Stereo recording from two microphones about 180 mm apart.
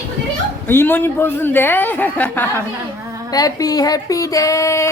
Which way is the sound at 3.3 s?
20° left (ahead or behind).